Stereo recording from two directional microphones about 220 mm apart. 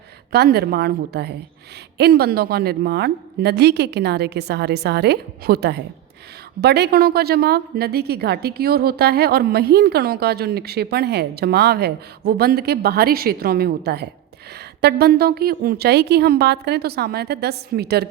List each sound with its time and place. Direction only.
0.3 s a woman's voice: 45° right (ahead or behind)